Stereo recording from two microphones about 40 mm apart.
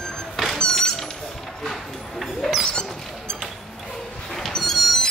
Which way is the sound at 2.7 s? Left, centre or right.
Left.